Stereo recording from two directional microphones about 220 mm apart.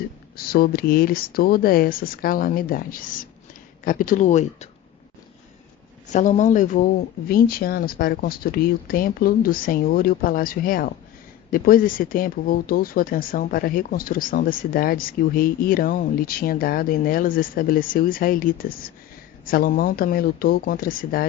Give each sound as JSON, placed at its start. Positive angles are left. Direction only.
{"t": 0.3, "sound": "speech", "side_deg": 40}
{"t": 6.1, "sound": "speech", "side_deg": 35}